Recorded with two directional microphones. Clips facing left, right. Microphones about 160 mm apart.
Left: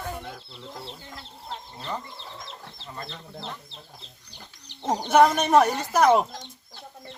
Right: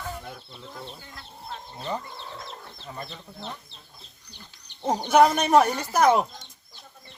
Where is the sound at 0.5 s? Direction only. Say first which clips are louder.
Left 1 dB; 90° left.